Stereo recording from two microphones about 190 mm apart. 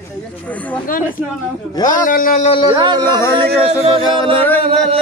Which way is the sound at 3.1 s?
15° left (ahead or behind).